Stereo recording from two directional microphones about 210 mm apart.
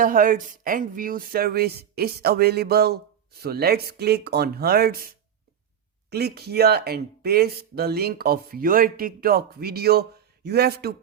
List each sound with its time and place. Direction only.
0.0 s speech: 40° right (ahead or behind)